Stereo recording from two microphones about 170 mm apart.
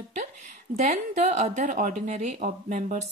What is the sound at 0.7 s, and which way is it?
A woman's voice, 40° right (ahead or behind).